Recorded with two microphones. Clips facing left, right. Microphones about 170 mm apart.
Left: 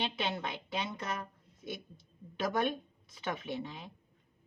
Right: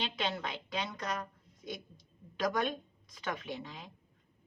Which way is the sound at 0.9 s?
25° left (ahead or behind).